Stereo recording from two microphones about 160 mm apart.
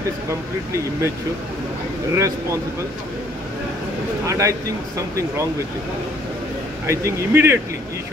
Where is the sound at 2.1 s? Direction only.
20° right (ahead or behind).